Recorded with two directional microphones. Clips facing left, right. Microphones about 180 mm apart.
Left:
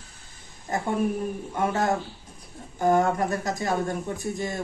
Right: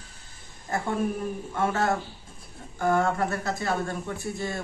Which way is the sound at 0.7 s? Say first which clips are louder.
Left 2 dB; 15° left (ahead or behind).